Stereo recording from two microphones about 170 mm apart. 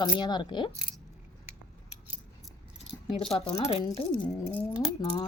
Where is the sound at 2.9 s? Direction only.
35° left (ahead or behind).